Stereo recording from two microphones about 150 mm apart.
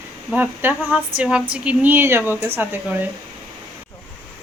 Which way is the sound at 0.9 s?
10° right (ahead or behind).